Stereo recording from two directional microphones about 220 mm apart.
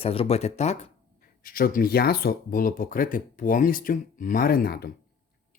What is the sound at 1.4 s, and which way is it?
Speech, 40° left (ahead or behind).